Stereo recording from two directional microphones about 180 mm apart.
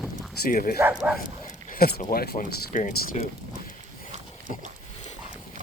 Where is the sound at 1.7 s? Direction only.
55° left (ahead or behind).